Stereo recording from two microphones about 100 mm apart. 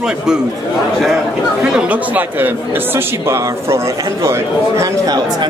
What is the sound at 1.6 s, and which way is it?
Speech, 10° right (ahead or behind).